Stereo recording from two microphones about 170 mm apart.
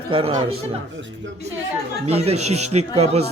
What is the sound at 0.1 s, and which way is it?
Speech, 30° right (ahead or behind).